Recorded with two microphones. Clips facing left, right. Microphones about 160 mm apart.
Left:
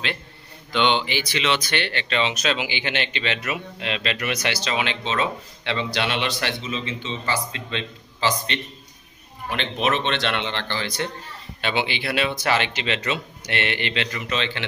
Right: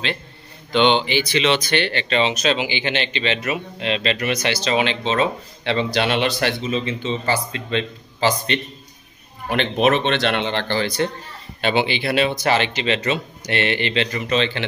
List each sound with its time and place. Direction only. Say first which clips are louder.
0.7 s speech: right 5 dB; 25° right (ahead or behind)